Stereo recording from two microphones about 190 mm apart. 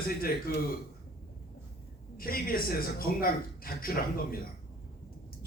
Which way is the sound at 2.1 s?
50° left (ahead or behind).